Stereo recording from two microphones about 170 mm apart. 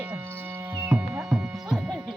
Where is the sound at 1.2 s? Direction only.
Centre (ahead or behind).